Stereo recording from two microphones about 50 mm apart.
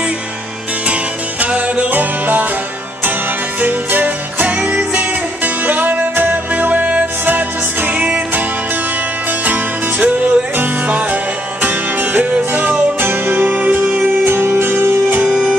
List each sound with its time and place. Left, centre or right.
0.8 s music: right
3.6 s music: right
9.4 s music: right
13.1 s music: right
14.2 s music: right
15.2 s music: centre